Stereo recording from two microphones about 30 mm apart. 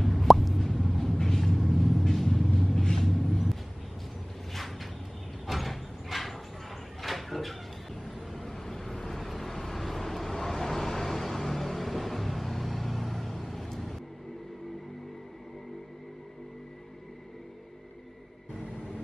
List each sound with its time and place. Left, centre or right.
0.0 s plop: centre
1.2 s vehicle: centre
2.8 s vehicle: centre
4.6 s a sound: centre
5.5 s sliding door: centre
7.0 s a sound: centre
8.3 s vehicle: centre
18.5 s vehicle: centre